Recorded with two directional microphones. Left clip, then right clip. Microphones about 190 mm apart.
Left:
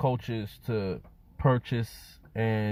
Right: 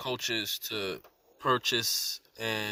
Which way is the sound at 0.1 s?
15° right (ahead or behind).